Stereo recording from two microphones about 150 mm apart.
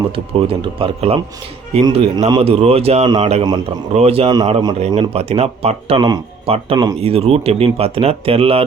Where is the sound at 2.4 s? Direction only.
45° right (ahead or behind).